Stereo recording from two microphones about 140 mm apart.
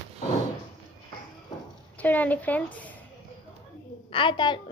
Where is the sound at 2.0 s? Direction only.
10° left (ahead or behind).